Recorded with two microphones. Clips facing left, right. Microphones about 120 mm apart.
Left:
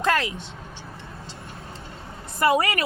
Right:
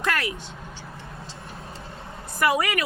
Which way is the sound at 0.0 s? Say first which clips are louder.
Left 4 dB; 25° left (ahead or behind).